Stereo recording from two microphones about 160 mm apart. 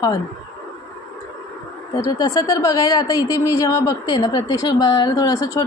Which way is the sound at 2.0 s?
20° left (ahead or behind).